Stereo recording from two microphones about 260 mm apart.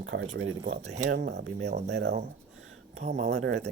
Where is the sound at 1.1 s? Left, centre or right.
Right.